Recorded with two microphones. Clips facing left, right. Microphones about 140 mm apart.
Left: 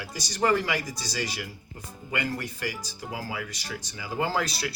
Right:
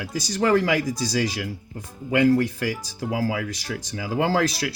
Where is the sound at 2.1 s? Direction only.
90° right.